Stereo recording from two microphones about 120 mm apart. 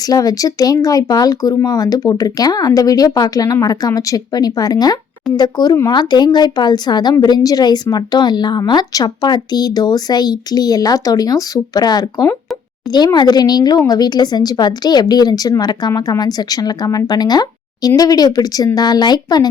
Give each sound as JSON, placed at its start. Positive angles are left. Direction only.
{"t": 0.1, "sound": "a woman's voice", "side_deg": 30}